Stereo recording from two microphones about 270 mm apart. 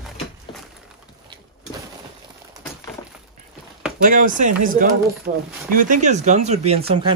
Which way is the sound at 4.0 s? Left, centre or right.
Right.